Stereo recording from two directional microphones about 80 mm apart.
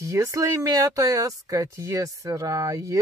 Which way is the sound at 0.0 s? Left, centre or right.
Right.